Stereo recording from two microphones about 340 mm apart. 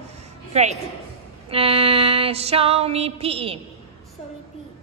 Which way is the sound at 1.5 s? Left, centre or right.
Centre.